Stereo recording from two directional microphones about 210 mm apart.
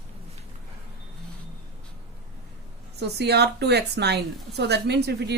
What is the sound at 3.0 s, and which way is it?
A woman's voice, 50° right (ahead or behind).